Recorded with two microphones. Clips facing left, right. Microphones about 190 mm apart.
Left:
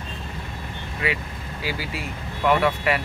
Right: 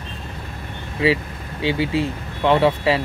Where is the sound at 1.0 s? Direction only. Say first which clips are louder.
Right 9 dB; 25° right (ahead or behind).